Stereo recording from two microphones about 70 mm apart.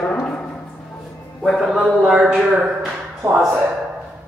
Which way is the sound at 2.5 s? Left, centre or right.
Centre.